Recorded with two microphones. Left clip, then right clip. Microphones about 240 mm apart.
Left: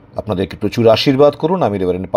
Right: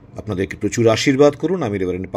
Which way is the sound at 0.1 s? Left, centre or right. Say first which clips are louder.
Left 4 dB; centre.